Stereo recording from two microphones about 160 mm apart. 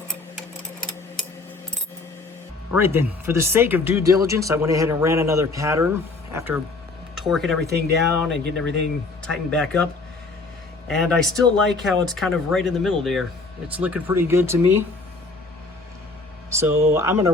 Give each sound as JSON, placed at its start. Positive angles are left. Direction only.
{"t": 2.7, "sound": "speech", "side_deg": -15}
{"t": 7.2, "sound": "speech", "side_deg": 0}
{"t": 7.8, "sound": "speech", "side_deg": -90}
{"t": 9.2, "sound": "speech", "side_deg": 5}
{"t": 10.8, "sound": "speech", "side_deg": 5}
{"t": 16.5, "sound": "speech", "side_deg": -15}